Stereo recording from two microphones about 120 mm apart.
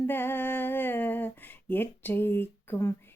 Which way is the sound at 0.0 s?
20° left (ahead or behind).